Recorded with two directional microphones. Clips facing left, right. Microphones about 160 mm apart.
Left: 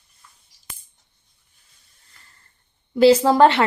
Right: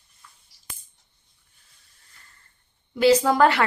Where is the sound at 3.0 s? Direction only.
30° left (ahead or behind).